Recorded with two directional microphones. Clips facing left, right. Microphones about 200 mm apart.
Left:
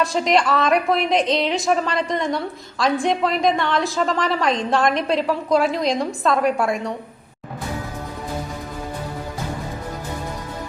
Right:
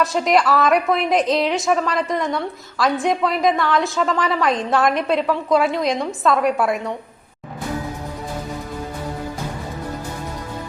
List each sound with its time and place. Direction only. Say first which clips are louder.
0.0 s a woman's voice: right 1 dB; centre (ahead or behind)